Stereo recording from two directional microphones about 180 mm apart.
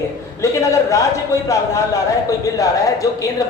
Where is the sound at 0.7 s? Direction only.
15° left (ahead or behind).